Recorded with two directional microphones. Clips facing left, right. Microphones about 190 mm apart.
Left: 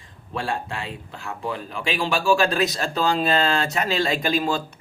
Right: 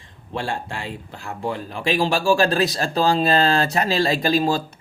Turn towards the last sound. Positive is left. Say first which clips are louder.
# right 3 dB
turn(degrees=-35)  # may be behind; listen again after turning